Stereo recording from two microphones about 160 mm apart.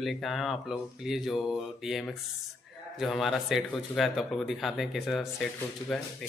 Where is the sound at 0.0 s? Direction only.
Centre (ahead or behind).